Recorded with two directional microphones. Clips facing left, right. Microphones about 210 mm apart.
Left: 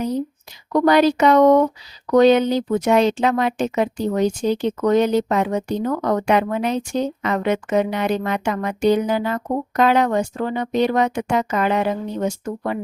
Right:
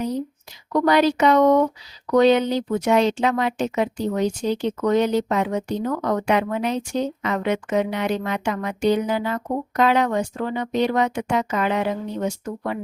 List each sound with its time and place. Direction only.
0.7 s a woman's voice: 45° left (ahead or behind)